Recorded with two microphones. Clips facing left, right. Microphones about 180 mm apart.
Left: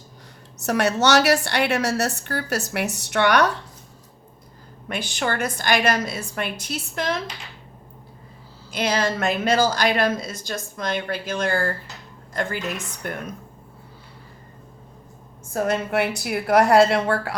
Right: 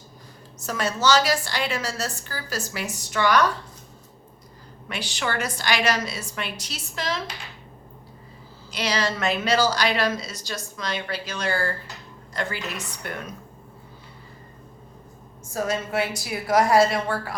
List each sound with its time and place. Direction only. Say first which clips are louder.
0.6 s a woman's voice: left 4 dB; 70° left (ahead or behind)
4.9 s a woman's voice: left 3 dB; 50° left (ahead or behind)
8.7 s a woman's voice: left 3 dB; 50° left (ahead or behind)
15.5 s a woman's voice: left 3 dB; 60° left (ahead or behind)